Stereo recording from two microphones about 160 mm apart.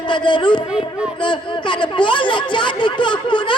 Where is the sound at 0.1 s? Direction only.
30° left (ahead or behind).